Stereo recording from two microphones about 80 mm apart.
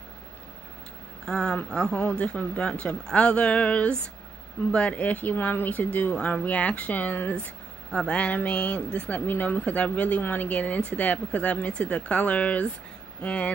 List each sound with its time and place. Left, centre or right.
1.2 s speech: centre